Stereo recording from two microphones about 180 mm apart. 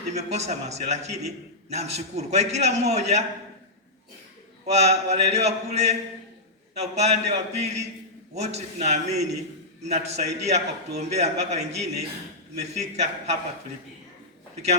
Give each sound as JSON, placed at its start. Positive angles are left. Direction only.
{"t": 0.1, "sound": "a man's voice", "side_deg": -40}
{"t": 4.6, "sound": "a man's voice", "side_deg": -40}